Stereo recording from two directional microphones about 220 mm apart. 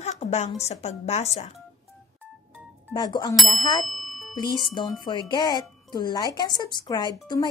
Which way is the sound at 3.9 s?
Centre (ahead or behind).